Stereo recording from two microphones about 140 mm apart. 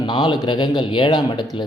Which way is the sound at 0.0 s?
35° left (ahead or behind).